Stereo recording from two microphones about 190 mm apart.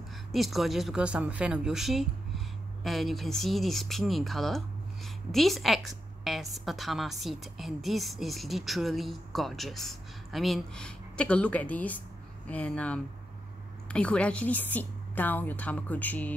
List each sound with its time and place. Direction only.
0.3 s a woman's voice: centre (ahead or behind)